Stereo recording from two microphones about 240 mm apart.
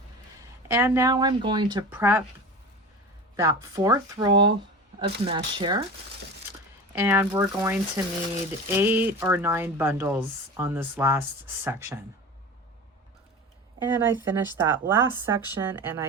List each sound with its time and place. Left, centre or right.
0.7 s speech: centre
3.3 s speech: centre
6.9 s speech: centre
13.8 s speech: centre